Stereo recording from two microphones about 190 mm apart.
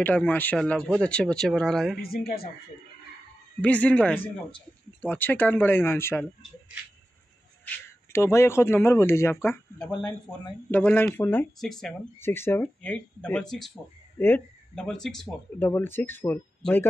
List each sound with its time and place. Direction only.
0.0 s speech: 10° left (ahead or behind)
2.0 s a man's voice: 55° left (ahead or behind)
3.6 s speech: 5° left (ahead or behind)
4.2 s speech: 25° left (ahead or behind)
5.0 s speech: 10° left (ahead or behind)
7.6 s speech: 15° left (ahead or behind)
10.7 s speech: 10° left (ahead or behind)
12.2 s speech: 10° left (ahead or behind)